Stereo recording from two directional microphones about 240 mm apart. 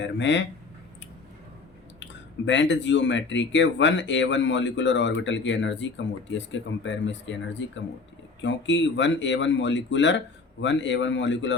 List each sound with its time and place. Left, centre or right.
0.0 s speech: left
2.0 s speech: left